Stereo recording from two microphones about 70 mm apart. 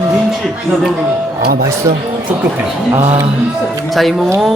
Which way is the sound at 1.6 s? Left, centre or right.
Right.